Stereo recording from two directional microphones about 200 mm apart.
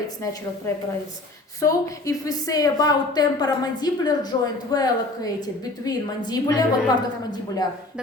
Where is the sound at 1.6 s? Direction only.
15° left (ahead or behind).